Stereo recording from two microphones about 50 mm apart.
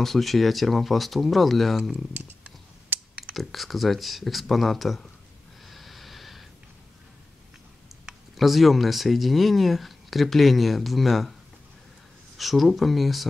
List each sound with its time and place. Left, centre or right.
0.0 s speech: centre
2.1 s a sound: right
3.3 s speech: centre
5.7 s snort: centre
8.4 s speech: centre
12.4 s speech: centre